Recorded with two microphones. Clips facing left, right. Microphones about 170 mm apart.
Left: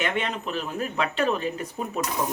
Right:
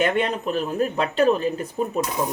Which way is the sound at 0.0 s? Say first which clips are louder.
Right 6 dB; 40° right (ahead or behind).